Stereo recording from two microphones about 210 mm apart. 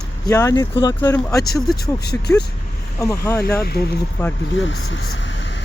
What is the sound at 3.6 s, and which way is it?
Speech, 50° left (ahead or behind).